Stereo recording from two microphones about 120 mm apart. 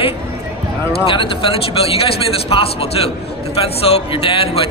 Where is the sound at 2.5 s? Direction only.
50° left (ahead or behind).